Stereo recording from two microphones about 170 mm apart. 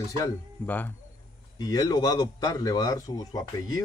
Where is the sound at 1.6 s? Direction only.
20° left (ahead or behind).